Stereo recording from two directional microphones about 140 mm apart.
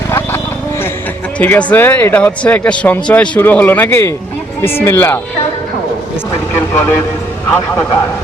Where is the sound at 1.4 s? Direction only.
15° left (ahead or behind).